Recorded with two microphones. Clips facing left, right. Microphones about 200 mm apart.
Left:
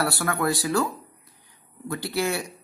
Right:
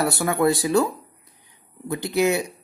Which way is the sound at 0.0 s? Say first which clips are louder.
Right 5 dB; 20° right (ahead or behind).